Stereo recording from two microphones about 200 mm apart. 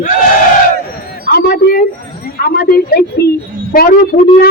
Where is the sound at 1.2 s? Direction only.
50° left (ahead or behind).